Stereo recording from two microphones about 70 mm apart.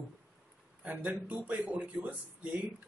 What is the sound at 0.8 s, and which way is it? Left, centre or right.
Speech, right.